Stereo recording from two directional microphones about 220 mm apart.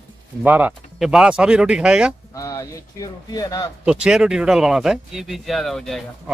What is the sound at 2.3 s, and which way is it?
Speech, 15° left (ahead or behind).